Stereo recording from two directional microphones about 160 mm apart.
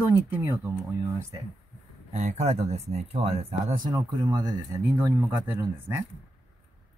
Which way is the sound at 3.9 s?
25° right (ahead or behind).